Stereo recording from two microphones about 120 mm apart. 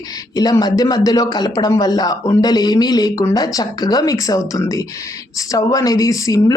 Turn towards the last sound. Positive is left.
turn(degrees=30)  # may be behind; listen again after turning